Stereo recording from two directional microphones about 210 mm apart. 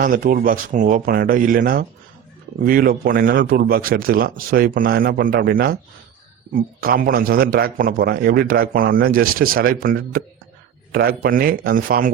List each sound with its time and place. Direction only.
0.0 s a man's voice: 40° right (ahead or behind)